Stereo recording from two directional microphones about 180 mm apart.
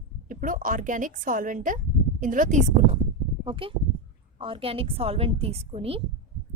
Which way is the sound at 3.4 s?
30° right (ahead or behind).